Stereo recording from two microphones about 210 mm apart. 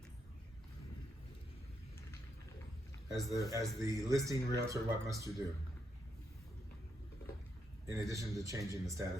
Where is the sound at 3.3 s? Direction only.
15° left (ahead or behind).